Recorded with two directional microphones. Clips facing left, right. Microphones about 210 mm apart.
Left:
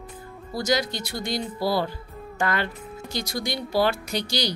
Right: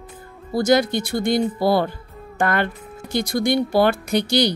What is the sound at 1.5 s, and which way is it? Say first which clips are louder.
Music: right 6 dB; 55° right (ahead or behind).